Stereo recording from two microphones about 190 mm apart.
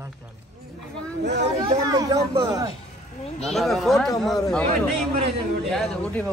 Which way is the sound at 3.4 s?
Centre (ahead or behind).